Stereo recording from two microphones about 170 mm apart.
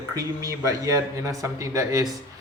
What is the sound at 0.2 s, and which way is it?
A woman's voice, 20° right (ahead or behind).